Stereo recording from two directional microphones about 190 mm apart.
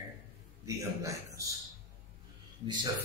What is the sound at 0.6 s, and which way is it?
Speech, 15° right (ahead or behind).